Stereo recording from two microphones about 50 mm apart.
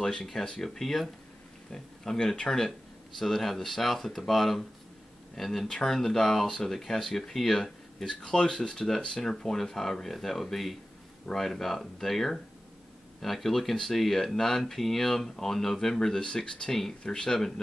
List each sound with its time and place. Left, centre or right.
0.0 s speech: centre
8.2 s speech: centre